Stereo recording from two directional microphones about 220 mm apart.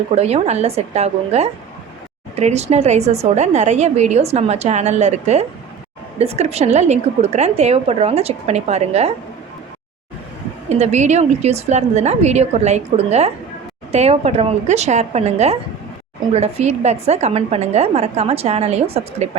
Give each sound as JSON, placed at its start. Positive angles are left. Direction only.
{"t": 0.2, "sound": "a woman's voice", "side_deg": -30}
{"t": 10.7, "sound": "a woman's voice", "side_deg": -30}